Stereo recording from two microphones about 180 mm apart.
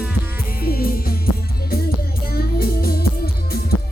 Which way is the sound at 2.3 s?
55° left (ahead or behind).